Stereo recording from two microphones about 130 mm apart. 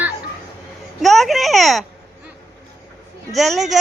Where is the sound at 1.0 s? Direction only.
Centre (ahead or behind).